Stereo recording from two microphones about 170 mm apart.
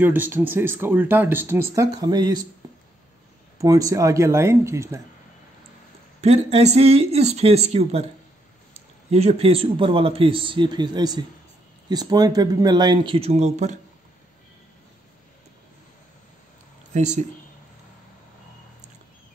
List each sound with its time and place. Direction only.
0.0 s speech: 10° right (ahead or behind)
2.6 s a sound: 25° right (ahead or behind)
3.5 s speech: 20° right (ahead or behind)
6.2 s speech: 40° right (ahead or behind)
16.9 s speech: 45° right (ahead or behind)